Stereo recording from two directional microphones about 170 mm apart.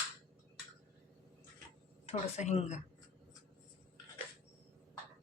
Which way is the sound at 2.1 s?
40° left (ahead or behind).